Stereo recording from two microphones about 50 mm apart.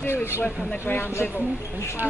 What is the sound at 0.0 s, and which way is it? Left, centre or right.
A woman's voice, left.